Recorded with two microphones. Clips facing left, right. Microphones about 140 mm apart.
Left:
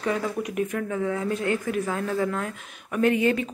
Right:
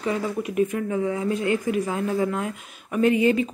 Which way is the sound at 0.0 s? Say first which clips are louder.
Right 1 dB; 5° right (ahead or behind).